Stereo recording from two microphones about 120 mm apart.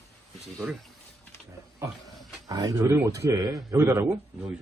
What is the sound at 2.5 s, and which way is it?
Speech, 30° right (ahead or behind).